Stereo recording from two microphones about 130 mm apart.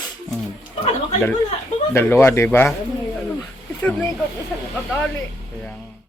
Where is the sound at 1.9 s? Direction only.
15° left (ahead or behind).